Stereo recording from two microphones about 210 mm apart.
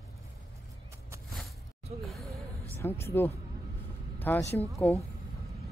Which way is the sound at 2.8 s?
10° left (ahead or behind).